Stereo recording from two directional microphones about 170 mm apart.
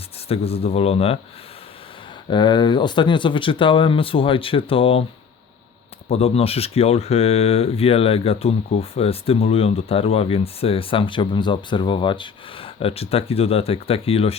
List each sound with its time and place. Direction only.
0.3 s speech: 35° left (ahead or behind)
2.3 s speech: 25° left (ahead or behind)
6.1 s speech: 35° left (ahead or behind)